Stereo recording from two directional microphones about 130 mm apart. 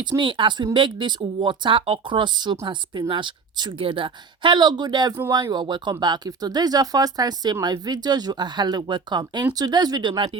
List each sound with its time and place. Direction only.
0.0 s speech: 40° right (ahead or behind)